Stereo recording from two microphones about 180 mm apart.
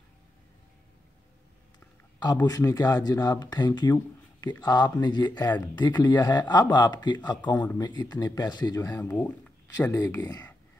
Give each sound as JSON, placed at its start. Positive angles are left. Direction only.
{"t": 2.3, "sound": "speech", "side_deg": 20}